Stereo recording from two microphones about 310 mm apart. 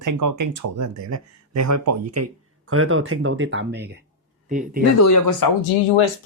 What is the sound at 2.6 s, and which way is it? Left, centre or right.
Speech, right.